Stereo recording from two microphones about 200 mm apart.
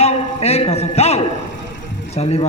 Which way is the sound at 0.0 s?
30° left (ahead or behind).